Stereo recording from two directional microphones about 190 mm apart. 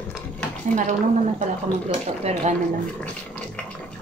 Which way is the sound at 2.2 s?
35° right (ahead or behind).